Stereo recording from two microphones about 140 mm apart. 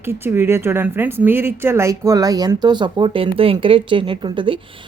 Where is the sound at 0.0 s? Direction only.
15° right (ahead or behind).